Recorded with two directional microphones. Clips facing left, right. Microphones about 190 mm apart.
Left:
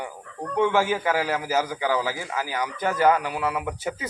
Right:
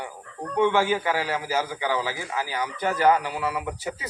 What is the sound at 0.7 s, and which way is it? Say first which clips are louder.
Speech: even; 45° left (ahead or behind).